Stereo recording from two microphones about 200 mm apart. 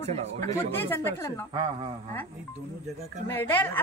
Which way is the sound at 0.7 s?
10° left (ahead or behind).